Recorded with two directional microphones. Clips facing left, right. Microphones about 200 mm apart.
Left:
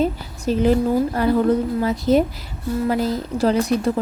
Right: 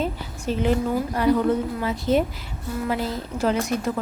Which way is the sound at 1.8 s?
40° left (ahead or behind).